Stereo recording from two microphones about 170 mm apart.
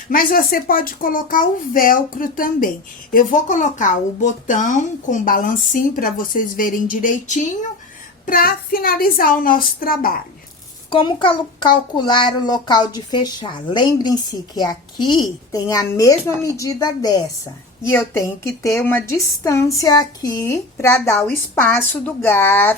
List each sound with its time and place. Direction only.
0.1 s a child's voice: 55° left (ahead or behind)
8.3 s a child's voice: 60° left (ahead or behind)
10.8 s a child's voice: 30° left (ahead or behind); by 22.7 s 10° left (ahead or behind)